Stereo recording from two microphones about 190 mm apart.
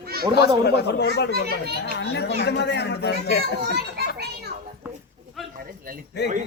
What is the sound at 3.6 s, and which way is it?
Speech, 55° right (ahead or behind).